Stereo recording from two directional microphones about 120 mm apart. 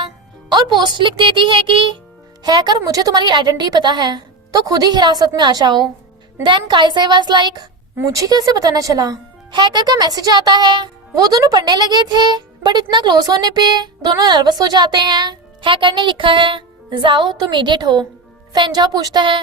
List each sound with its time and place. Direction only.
0.8 s speech: 40° right (ahead or behind)
2.4 s speech: 35° right (ahead or behind)
7.9 s speech: 25° right (ahead or behind)